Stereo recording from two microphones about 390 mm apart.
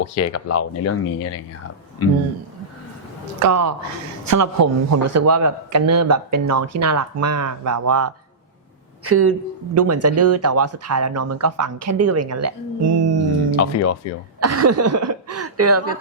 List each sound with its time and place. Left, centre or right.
0.0 s speech: left
3.4 s a man's voice: right
14.4 s a man's voice: right